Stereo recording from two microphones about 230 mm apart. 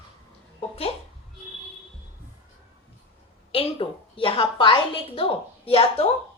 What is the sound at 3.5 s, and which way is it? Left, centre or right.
A woman's voice, left.